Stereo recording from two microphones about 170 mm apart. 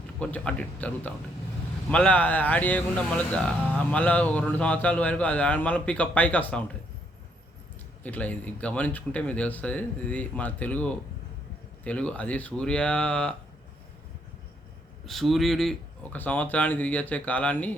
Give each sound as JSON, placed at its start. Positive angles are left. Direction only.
{"t": 0.2, "sound": "speech", "side_deg": 5}
{"t": 8.0, "sound": "speech", "side_deg": 10}
{"t": 15.0, "sound": "speech", "side_deg": 0}